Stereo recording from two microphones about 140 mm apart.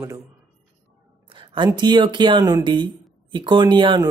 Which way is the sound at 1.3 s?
35° right (ahead or behind).